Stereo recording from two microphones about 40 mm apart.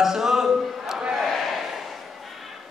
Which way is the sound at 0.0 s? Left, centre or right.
Centre.